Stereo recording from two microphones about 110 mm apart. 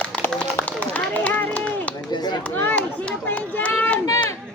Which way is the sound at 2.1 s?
40° left (ahead or behind).